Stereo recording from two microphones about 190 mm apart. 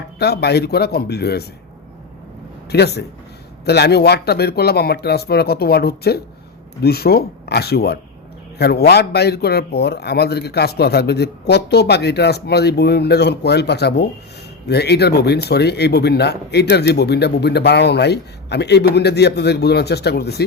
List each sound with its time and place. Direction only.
0.2 s speech: 60° left (ahead or behind)
2.6 s speech: 60° left (ahead or behind)